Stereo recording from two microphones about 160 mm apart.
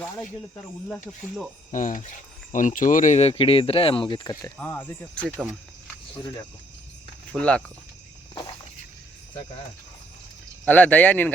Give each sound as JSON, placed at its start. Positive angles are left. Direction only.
{"t": 0.5, "sound": "speech", "side_deg": 10}
{"t": 1.7, "sound": "speech", "side_deg": 55}
{"t": 4.3, "sound": "speech", "side_deg": 15}
{"t": 7.3, "sound": "speech", "side_deg": 5}
{"t": 10.7, "sound": "speech", "side_deg": 10}